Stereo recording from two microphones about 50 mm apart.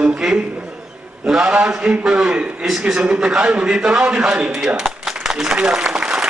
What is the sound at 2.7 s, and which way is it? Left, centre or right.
Speech, centre.